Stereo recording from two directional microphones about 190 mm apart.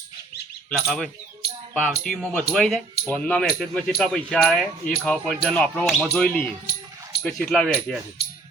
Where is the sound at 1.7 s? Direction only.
Centre (ahead or behind).